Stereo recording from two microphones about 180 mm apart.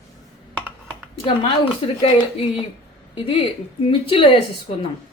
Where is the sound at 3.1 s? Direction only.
30° left (ahead or behind).